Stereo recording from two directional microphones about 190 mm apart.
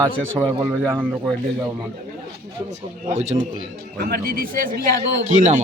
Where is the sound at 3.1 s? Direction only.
35° right (ahead or behind).